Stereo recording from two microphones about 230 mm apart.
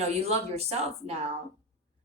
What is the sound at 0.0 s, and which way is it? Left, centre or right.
Speech, right.